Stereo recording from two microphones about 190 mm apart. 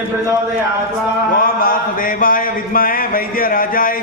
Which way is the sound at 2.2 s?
50° left (ahead or behind).